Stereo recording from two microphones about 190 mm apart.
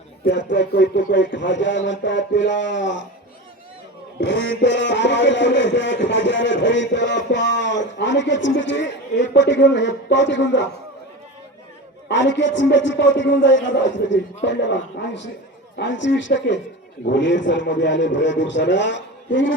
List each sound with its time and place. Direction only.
0.3 s speech: 70° left (ahead or behind)
4.2 s speech: 70° left (ahead or behind)
12.0 s speech: 70° left (ahead or behind)